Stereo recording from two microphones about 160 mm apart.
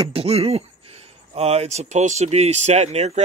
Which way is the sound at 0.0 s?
35° right (ahead or behind).